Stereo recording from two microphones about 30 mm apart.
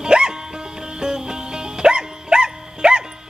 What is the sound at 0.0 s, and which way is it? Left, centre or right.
Music, right.